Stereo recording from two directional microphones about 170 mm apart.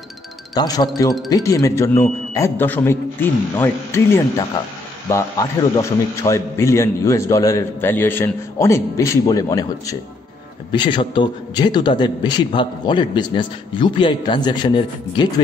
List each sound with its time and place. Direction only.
0.6 s a man's voice: 20° left (ahead or behind)